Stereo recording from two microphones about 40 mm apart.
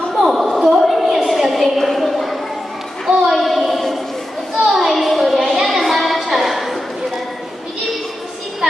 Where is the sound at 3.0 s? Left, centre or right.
Centre.